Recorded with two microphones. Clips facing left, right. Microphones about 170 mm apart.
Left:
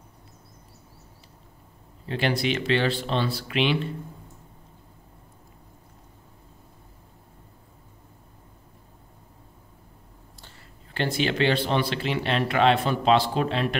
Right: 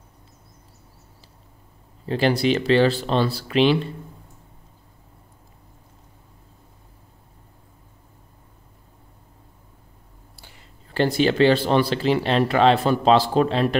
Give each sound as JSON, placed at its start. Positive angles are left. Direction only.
{"t": 2.0, "sound": "speech", "side_deg": -35}
{"t": 10.3, "sound": "a sound", "side_deg": -10}
{"t": 10.9, "sound": "speech", "side_deg": -35}